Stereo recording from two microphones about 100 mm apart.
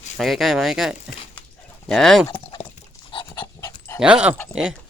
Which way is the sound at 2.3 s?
60° left (ahead or behind).